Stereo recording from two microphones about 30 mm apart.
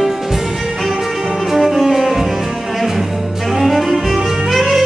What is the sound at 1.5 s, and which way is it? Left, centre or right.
Music, centre.